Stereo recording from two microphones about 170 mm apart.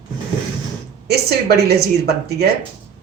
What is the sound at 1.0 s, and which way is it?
A woman's voice, 70° right (ahead or behind).